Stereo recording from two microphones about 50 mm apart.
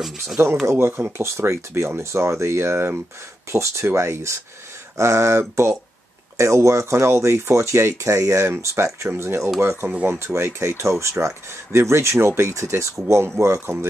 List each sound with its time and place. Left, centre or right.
0.7 s speech: right
2.0 s speech: right
3.5 s speech: right
6.3 s speech: right
8.5 s speech: right
8.8 s speech: right
13.1 s speech: right